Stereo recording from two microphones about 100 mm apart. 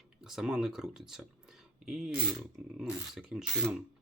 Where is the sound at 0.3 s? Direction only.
5° right (ahead or behind).